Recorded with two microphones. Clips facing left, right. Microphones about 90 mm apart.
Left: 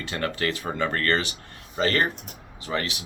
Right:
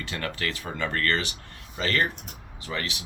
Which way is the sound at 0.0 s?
30° left (ahead or behind).